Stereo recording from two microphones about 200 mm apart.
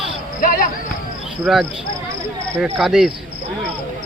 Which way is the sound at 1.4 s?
Centre (ahead or behind).